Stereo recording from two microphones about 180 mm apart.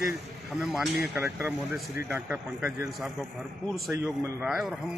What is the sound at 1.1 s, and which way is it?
Speech, 15° right (ahead or behind).